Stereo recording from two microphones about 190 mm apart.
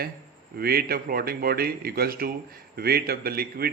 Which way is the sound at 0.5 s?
55° right (ahead or behind).